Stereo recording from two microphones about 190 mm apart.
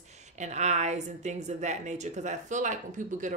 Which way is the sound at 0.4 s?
35° right (ahead or behind).